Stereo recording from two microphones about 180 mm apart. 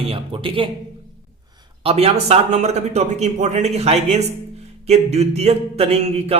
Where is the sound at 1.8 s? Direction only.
35° right (ahead or behind).